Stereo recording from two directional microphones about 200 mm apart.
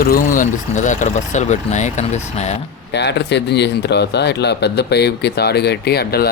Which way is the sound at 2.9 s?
60° left (ahead or behind).